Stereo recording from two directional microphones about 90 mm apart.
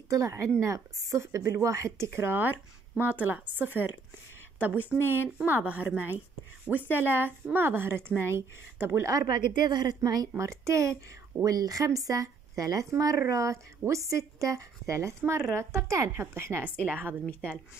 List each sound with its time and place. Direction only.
0.1 s a woman's voice: 35° right (ahead or behind)
9.6 s a woman's voice: 50° right (ahead or behind); by 16.7 s 30° right (ahead or behind)
16.7 s speech: 15° left (ahead or behind)